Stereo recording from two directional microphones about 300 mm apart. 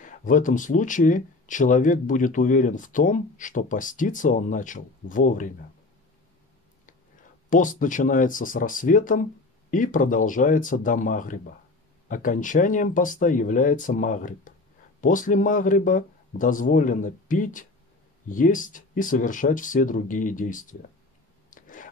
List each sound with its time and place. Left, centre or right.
0.0 s speech: left
7.4 s speech: left
21.5 s zipper: left